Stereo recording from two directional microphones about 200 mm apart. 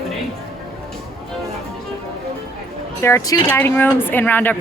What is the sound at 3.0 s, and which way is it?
Speech, 15° left (ahead or behind).